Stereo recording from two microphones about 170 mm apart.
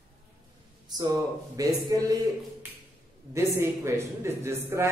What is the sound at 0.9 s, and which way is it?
Speech, 20° right (ahead or behind).